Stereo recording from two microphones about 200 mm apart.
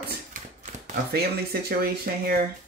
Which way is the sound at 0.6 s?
35° right (ahead or behind).